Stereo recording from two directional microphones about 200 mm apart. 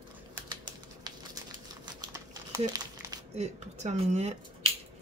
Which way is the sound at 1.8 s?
20° right (ahead or behind).